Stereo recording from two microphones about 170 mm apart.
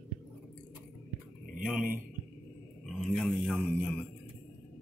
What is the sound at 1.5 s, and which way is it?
Speech, 55° right (ahead or behind).